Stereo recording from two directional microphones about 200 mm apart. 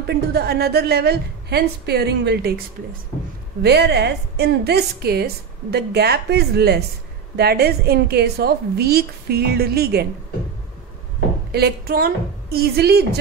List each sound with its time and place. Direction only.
0.0 s a woman's voice: 50° right (ahead or behind)
11.5 s a woman's voice: 50° right (ahead or behind)